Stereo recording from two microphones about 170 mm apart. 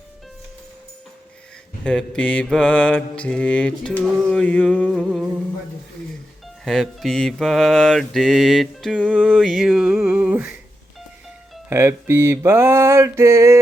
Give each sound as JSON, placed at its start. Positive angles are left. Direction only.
{"t": 1.8, "sound": "mantra", "side_deg": 5}
{"t": 6.7, "sound": "mantra", "side_deg": 0}
{"t": 11.7, "sound": "mantra", "side_deg": -15}